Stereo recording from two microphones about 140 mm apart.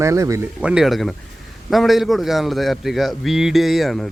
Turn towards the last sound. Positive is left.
turn(degrees=0)  # may be behind; listen again after turning